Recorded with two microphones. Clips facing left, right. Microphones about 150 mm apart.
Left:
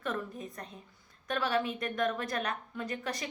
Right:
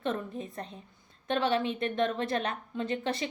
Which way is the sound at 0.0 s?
30° right (ahead or behind).